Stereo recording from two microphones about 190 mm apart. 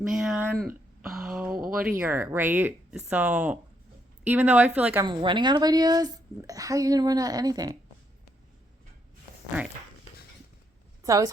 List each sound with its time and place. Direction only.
0.0 s speech: centre (ahead or behind)
5.0 s a woman's voice: 25° right (ahead or behind)
11.0 s a woman's voice: 15° right (ahead or behind)